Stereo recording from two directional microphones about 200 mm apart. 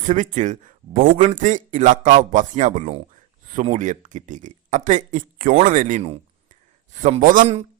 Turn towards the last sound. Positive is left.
turn(degrees=-35)  # may be behind; listen again after turning